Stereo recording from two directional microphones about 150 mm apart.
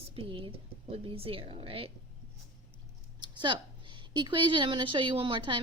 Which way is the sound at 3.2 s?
30° right (ahead or behind).